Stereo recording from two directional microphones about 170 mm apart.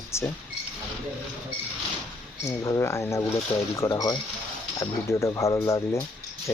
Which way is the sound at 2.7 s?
15° left (ahead or behind).